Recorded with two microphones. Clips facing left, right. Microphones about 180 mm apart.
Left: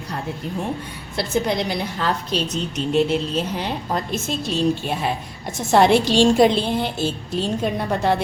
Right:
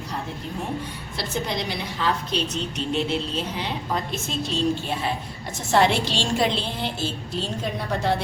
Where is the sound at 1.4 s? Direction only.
50° left (ahead or behind).